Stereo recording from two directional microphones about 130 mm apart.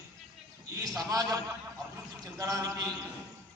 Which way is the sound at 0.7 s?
30° right (ahead or behind).